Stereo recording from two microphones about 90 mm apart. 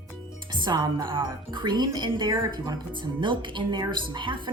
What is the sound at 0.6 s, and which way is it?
Speech, 55° right (ahead or behind).